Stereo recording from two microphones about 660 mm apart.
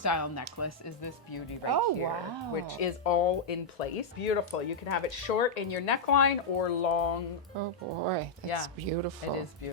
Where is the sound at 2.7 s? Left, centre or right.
Left.